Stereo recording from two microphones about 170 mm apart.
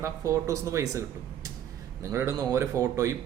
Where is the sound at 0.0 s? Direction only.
15° right (ahead or behind).